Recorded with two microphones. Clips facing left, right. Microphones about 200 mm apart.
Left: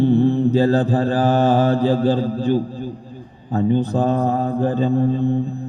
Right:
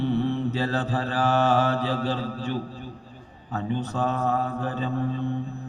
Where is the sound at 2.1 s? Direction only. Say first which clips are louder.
Left 10 dB; 35° left (ahead or behind).